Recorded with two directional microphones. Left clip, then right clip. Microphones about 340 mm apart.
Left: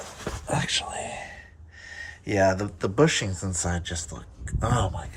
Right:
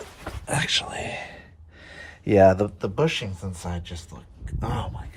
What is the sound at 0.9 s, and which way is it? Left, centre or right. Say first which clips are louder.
Speech: right 1 dB; right.